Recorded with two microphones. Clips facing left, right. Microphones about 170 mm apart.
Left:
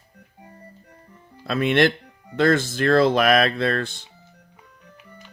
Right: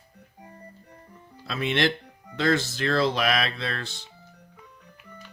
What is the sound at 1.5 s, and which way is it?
Speech, 55° left (ahead or behind).